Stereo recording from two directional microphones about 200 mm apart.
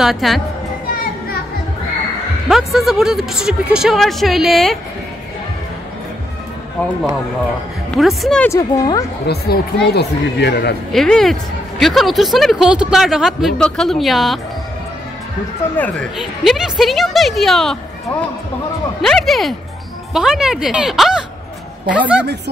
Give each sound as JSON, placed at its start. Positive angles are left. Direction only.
{"t": 0.0, "sound": "speech", "side_deg": 0}
{"t": 0.9, "sound": "children playing", "side_deg": 50}
{"t": 2.4, "sound": "speech", "side_deg": 0}
{"t": 7.9, "sound": "speech", "side_deg": 0}
{"t": 8.5, "sound": "a woman's voice", "side_deg": 15}
{"t": 9.3, "sound": "speech", "side_deg": 55}
{"t": 10.9, "sound": "speech", "side_deg": 0}
{"t": 15.7, "sound": "a woman's voice", "side_deg": 10}
{"t": 18.9, "sound": "speech", "side_deg": 0}